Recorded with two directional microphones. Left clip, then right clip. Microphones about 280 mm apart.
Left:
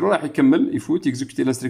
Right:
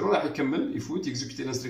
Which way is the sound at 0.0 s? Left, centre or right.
Left.